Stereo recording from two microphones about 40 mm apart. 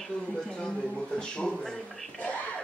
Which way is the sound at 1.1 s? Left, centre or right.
Left.